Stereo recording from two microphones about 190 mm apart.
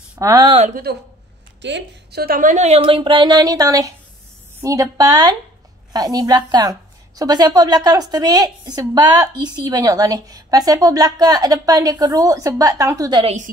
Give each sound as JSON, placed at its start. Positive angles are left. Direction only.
{"t": 0.2, "sound": "a woman's voice", "side_deg": -15}
{"t": 0.6, "sound": "a woman's voice", "side_deg": -35}
{"t": 1.6, "sound": "a woman's voice", "side_deg": -65}
{"t": 13.2, "sound": "a woman's voice", "side_deg": -35}